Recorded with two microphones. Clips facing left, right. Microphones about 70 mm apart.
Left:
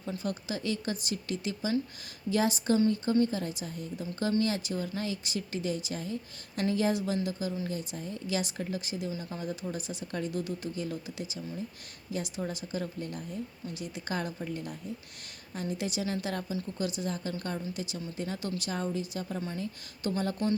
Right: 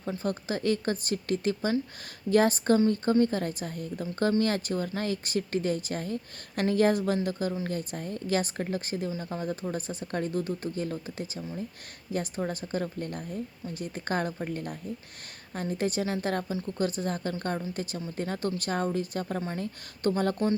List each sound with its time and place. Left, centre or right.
0.0 s a woman's voice: right